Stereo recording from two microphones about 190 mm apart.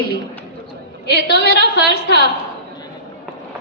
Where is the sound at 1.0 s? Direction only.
65° left (ahead or behind).